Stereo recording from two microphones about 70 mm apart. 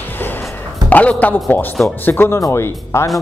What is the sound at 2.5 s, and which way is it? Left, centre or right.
Speech, left.